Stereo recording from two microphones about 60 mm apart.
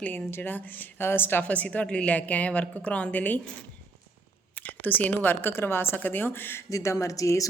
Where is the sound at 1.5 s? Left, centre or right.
Left.